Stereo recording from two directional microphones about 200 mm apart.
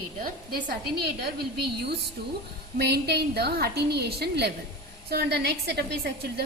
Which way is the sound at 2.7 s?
55° right (ahead or behind).